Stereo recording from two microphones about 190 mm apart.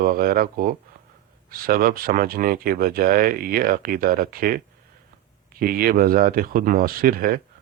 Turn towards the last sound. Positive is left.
turn(degrees=-50)  # may be behind; listen again after turning